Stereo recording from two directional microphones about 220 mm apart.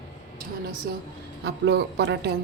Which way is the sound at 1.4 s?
45° right (ahead or behind).